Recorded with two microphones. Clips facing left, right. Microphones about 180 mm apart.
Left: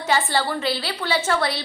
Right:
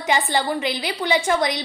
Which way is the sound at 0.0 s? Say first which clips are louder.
Right 1 dB; 15° right (ahead or behind).